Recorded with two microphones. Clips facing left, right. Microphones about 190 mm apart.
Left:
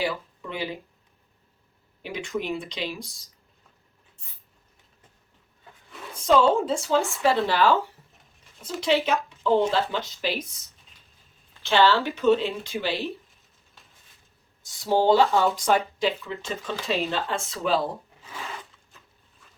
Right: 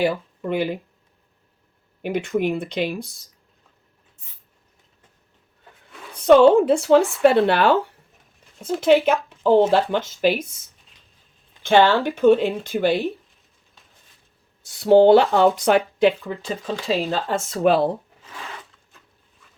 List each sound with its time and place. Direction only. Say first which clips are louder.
0.0 s speech: right 7 dB; 55° right (ahead or behind)
2.0 s speech: right 8 dB; 55° right (ahead or behind)
6.1 s speech: right 8 dB; 65° right (ahead or behind)
11.6 s speech: right 5 dB; 50° right (ahead or behind)
14.6 s speech: right 10 dB; 60° right (ahead or behind)
16.2 s speech: right 4 dB; 35° right (ahead or behind); by 17.8 s 60° right (ahead or behind)